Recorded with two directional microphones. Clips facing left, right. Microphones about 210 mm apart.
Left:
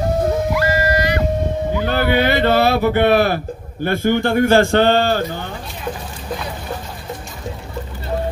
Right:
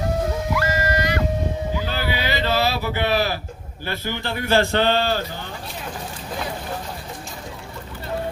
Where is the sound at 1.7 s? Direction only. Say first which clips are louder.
Left 8 dB; 60° left (ahead or behind).